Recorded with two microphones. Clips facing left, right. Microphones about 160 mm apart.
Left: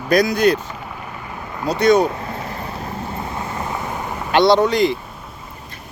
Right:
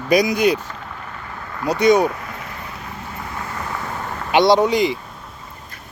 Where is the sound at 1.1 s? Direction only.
15° left (ahead or behind).